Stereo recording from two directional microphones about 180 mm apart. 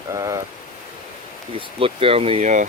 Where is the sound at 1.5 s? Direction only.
30° right (ahead or behind).